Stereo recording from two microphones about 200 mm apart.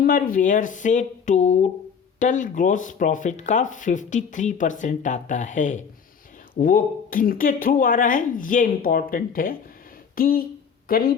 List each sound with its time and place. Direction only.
0.0 s speech: 45° left (ahead or behind)